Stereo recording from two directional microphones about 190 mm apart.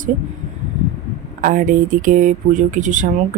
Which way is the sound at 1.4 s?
45° right (ahead or behind).